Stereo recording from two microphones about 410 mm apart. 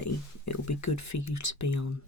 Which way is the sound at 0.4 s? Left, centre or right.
Left.